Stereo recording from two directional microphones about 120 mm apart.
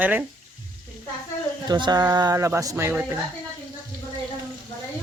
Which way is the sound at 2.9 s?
10° right (ahead or behind).